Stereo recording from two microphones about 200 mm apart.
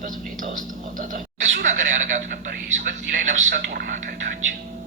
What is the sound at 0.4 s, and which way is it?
Speech, 40° right (ahead or behind).